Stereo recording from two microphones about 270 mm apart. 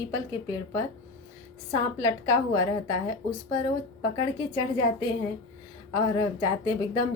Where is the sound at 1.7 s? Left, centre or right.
Centre.